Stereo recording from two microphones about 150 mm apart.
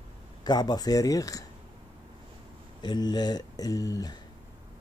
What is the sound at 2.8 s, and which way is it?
Speech, 30° left (ahead or behind).